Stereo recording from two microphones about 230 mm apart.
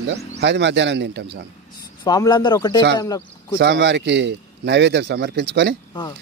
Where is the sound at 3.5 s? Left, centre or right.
Right.